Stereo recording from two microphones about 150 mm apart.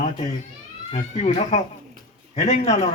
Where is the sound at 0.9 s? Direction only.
50° left (ahead or behind).